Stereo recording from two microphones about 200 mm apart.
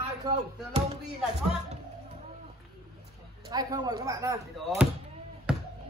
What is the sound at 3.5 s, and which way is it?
Speech, 20° right (ahead or behind).